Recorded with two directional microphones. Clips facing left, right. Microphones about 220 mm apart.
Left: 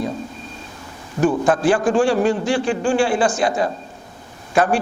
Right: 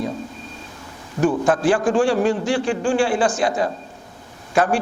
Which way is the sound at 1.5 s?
20° left (ahead or behind).